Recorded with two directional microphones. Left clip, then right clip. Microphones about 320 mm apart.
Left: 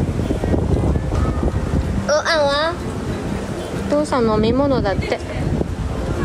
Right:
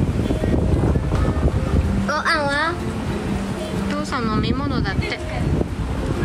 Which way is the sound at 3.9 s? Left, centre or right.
Centre.